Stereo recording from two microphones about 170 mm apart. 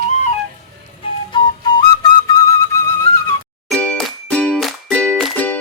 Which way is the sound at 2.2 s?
15° left (ahead or behind).